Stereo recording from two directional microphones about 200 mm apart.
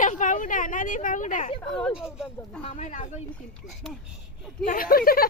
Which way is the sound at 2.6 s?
35° left (ahead or behind).